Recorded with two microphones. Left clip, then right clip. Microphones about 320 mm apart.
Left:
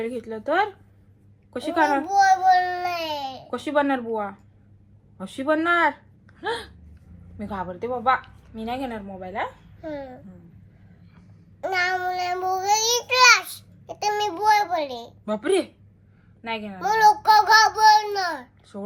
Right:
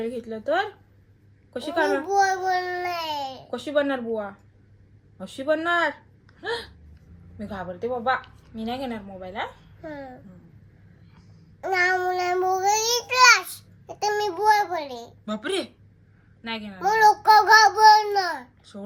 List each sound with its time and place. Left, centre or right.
0.0 s a woman's voice: centre
2.0 s child singing: centre
3.6 s speech: centre
5.5 s speech: centre
7.7 s a woman's voice: left
8.5 s a woman's voice: centre
9.8 s child singing: centre
11.6 s child singing: centre
15.3 s a woman's voice: centre
16.8 s child singing: centre